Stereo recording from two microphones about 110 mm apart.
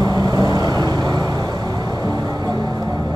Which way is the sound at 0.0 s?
35° right (ahead or behind).